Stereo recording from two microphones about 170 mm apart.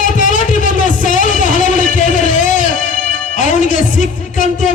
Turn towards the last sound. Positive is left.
turn(degrees=50)  # may be behind; listen again after turning